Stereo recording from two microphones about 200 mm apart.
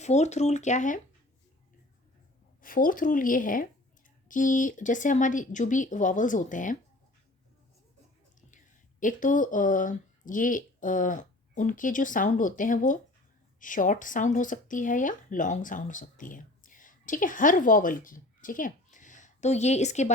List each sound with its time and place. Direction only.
0.0 s speech: 35° left (ahead or behind)
2.6 s speech: 45° left (ahead or behind)
8.4 s speech: 40° left (ahead or behind)